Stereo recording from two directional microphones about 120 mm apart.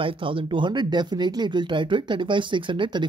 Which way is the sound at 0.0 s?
45° right (ahead or behind).